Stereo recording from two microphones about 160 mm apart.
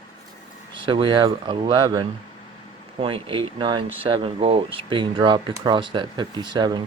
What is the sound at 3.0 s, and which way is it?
Speech, 35° right (ahead or behind).